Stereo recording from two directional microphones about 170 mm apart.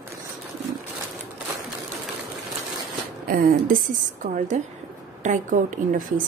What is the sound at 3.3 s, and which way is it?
Speech, 55° right (ahead or behind).